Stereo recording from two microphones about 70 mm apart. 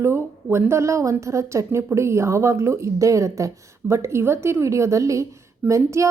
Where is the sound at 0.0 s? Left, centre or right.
Right.